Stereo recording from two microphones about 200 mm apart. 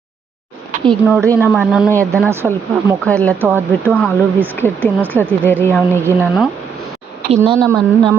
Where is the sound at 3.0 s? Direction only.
5° left (ahead or behind).